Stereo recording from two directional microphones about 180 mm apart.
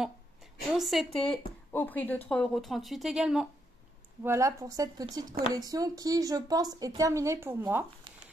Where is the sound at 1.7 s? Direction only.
10° left (ahead or behind).